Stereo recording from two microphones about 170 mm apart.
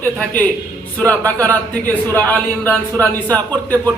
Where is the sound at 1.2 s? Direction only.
20° right (ahead or behind).